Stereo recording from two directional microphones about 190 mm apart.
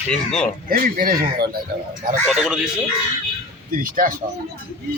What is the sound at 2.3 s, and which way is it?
Speech, centre (ahead or behind).